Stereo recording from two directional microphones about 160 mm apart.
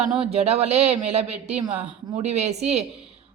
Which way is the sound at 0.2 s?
40° right (ahead or behind).